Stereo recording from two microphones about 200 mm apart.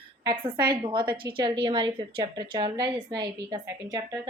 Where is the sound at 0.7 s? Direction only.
25° right (ahead or behind).